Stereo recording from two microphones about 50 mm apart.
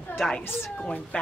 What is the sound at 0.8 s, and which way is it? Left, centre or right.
Speech, left.